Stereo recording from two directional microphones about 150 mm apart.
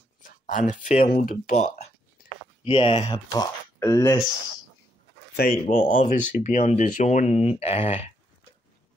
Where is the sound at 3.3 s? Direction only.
25° left (ahead or behind).